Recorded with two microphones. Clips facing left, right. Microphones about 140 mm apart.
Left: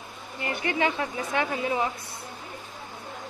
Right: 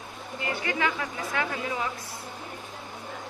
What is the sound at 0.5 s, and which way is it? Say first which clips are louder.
A woman's voice: left 3 dB; 25° left (ahead or behind).